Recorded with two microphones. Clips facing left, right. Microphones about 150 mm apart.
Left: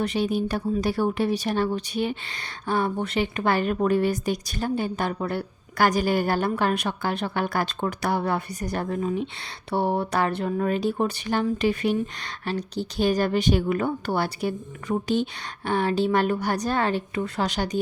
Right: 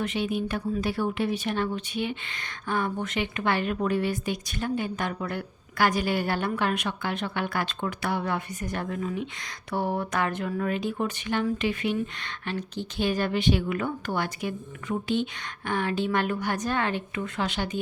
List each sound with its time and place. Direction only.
0.0 s speech: 35° left (ahead or behind)